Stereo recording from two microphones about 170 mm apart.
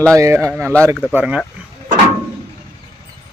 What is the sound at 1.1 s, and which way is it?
Speech, 5° right (ahead or behind).